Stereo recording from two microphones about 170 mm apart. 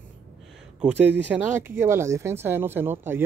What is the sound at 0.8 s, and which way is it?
Speech, 10° right (ahead or behind).